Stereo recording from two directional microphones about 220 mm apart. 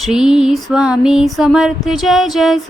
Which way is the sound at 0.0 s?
5° right (ahead or behind).